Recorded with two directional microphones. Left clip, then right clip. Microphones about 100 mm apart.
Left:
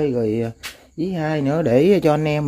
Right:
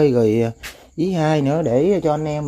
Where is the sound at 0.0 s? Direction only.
30° right (ahead or behind).